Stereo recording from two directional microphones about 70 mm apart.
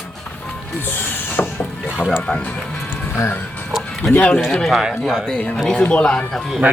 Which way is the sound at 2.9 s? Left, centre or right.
Left.